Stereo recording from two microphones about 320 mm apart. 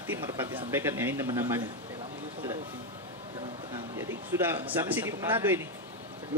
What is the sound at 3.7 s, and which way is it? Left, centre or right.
Speech, centre.